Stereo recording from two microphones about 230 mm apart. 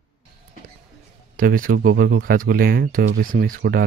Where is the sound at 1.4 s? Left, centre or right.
Right.